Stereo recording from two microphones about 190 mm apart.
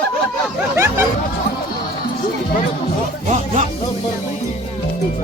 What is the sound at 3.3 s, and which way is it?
Music, 35° right (ahead or behind).